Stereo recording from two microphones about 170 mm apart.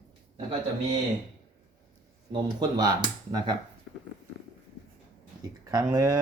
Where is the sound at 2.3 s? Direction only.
20° right (ahead or behind).